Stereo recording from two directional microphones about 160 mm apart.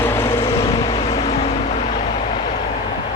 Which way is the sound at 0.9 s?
35° left (ahead or behind).